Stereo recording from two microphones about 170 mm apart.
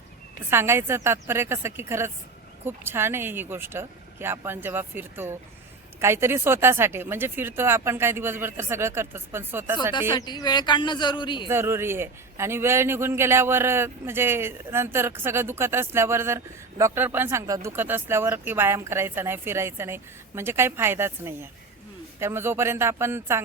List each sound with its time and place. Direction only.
0.5 s a man's voice: 15° right (ahead or behind)
10.2 s speech: 25° left (ahead or behind)
11.4 s a man's voice: 15° right (ahead or behind)